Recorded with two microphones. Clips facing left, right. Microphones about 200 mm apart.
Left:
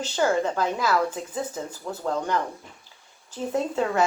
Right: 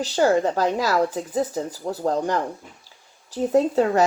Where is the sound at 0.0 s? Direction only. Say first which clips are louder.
Right 4 dB; 35° right (ahead or behind).